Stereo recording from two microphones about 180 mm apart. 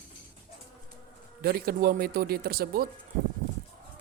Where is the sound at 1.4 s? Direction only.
55° right (ahead or behind).